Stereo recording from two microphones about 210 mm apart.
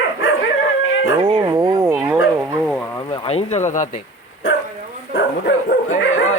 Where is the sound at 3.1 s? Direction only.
25° left (ahead or behind).